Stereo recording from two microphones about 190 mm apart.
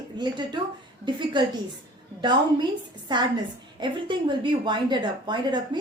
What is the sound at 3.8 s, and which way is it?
A woman's voice, 25° right (ahead or behind).